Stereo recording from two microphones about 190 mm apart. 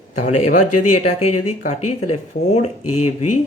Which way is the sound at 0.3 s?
40° left (ahead or behind).